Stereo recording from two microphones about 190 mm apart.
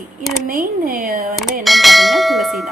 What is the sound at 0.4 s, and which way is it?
Speech, 50° right (ahead or behind).